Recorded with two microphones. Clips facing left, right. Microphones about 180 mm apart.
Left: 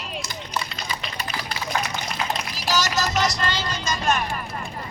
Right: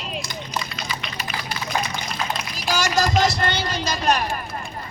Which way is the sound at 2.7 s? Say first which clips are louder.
Right 3 dB; 50° right (ahead or behind).